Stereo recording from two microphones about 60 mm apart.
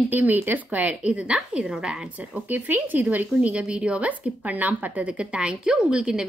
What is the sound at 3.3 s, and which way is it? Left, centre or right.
A woman's voice, centre.